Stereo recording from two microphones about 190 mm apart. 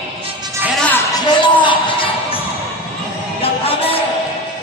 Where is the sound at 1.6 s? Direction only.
25° left (ahead or behind).